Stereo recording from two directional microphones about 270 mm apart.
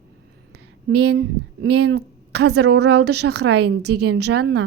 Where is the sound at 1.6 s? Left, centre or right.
Right.